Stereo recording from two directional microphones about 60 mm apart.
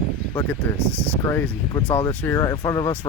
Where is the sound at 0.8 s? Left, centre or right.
Right.